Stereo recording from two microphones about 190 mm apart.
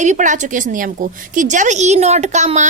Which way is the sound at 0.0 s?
40° right (ahead or behind).